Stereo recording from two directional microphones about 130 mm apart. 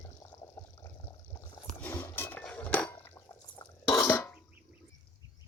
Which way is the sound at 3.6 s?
30° left (ahead or behind).